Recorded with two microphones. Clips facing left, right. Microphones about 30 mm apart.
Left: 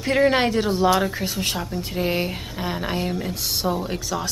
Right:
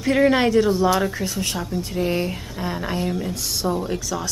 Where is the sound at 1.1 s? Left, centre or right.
Centre.